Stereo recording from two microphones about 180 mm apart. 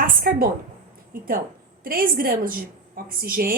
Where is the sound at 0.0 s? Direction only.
50° right (ahead or behind).